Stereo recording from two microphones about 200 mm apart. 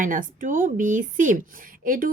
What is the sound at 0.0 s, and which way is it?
A woman's voice, 40° right (ahead or behind).